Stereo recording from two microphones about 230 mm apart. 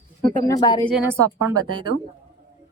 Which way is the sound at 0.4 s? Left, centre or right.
Centre.